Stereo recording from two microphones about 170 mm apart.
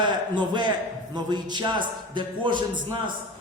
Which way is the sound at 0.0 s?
25° right (ahead or behind).